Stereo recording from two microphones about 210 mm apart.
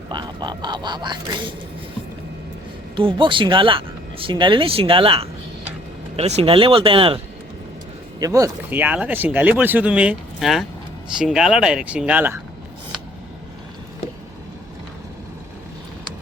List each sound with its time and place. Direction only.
0.1 s speech: 20° right (ahead or behind)
2.9 s speech: 25° right (ahead or behind)
8.2 s speech: 15° right (ahead or behind)